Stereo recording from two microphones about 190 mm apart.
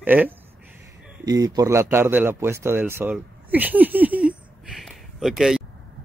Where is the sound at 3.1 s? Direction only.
10° right (ahead or behind).